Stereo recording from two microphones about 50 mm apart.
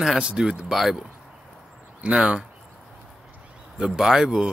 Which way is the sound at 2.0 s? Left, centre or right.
Right.